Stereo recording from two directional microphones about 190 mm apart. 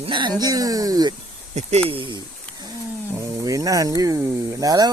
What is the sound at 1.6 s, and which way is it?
Speech, 35° right (ahead or behind).